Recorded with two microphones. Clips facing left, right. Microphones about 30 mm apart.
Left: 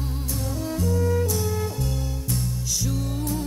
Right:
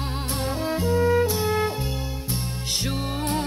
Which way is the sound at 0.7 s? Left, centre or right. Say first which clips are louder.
Right 4 dB; right.